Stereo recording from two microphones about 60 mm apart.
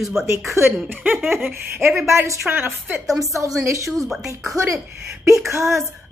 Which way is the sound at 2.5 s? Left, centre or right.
Right.